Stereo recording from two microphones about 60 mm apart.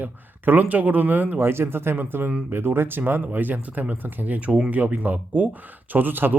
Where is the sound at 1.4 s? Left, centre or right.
Right.